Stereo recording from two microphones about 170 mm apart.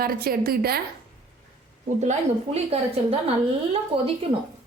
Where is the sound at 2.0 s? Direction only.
40° right (ahead or behind).